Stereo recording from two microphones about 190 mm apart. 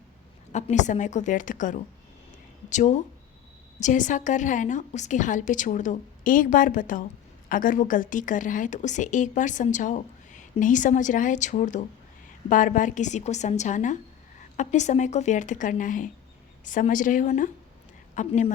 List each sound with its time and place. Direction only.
0.5 s a woman's voice: 40° left (ahead or behind)